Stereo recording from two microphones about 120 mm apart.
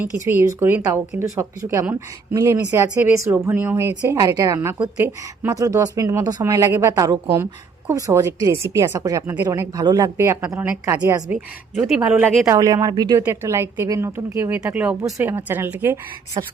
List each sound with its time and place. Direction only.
0.0 s speech: 15° right (ahead or behind)
5.5 s speech: 30° right (ahead or behind); by 12.3 s 10° right (ahead or behind)
12.5 s speech: 30° right (ahead or behind)
13.1 s speech: 25° right (ahead or behind)
14.6 s speech: 10° right (ahead or behind)
16.4 s speech: 40° right (ahead or behind)